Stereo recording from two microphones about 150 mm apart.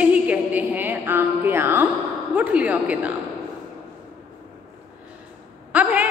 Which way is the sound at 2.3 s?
10° right (ahead or behind).